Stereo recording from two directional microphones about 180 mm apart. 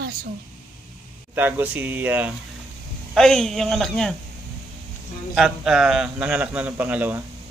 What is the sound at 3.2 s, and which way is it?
A man's voice, 5° left (ahead or behind).